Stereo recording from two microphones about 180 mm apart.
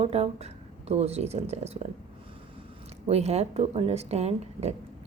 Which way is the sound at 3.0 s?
35° right (ahead or behind).